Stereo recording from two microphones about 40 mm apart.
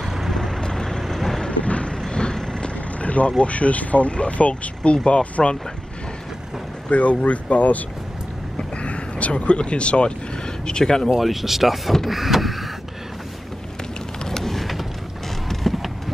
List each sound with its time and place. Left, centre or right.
0.0 s vehicle: centre
1.0 s vehicle: centre
1.5 s vehicle: left
2.0 s vehicle: centre
3.0 s vehicle: left
3.3 s speech: left
6.9 s speech: left
8.5 s vehicle: left
10.7 s speech: centre
11.1 s speech: centre
14.3 s a sound: centre